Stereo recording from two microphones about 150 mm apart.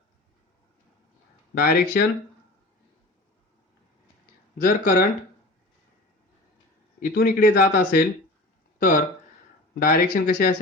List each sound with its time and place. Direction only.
1.5 s speech: 80° left
4.5 s speech: 65° left (ahead or behind)
7.0 s speech: 80° left
8.8 s speech: 60° left (ahead or behind)